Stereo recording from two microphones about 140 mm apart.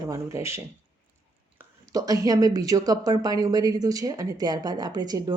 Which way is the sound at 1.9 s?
25° right (ahead or behind).